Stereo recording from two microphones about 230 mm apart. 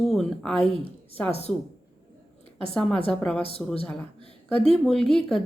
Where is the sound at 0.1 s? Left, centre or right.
Centre.